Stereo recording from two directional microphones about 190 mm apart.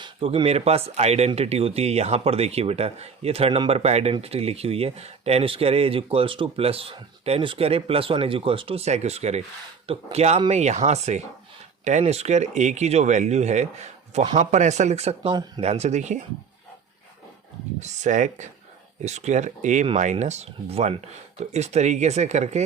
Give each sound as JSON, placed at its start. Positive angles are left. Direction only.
{"t": 0.0, "sound": "speech", "side_deg": -25}
{"t": 15.6, "sound": "speech", "side_deg": -35}
{"t": 17.7, "sound": "speech", "side_deg": -40}